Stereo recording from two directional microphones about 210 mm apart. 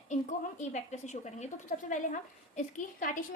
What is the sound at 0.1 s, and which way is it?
A woman's voice, 35° left (ahead or behind).